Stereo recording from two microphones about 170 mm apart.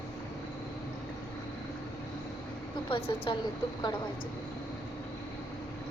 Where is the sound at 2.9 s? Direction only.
35° left (ahead or behind).